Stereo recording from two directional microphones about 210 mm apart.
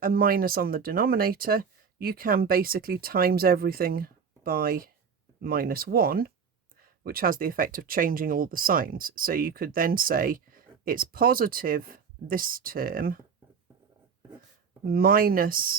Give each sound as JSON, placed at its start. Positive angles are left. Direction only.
{"t": 0.0, "sound": "speech", "side_deg": -45}
{"t": 14.8, "sound": "speech", "side_deg": -45}